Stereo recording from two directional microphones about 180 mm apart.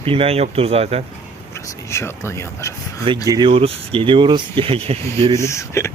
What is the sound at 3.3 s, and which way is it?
Speech, 25° right (ahead or behind).